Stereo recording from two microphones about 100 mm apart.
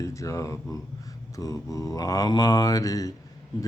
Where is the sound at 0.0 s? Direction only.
30° left (ahead or behind).